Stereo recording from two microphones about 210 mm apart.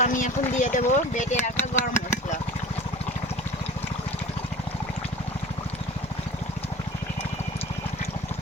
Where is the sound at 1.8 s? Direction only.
35° left (ahead or behind).